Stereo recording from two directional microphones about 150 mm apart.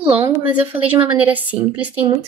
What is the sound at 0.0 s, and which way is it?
Speech, 35° right (ahead or behind).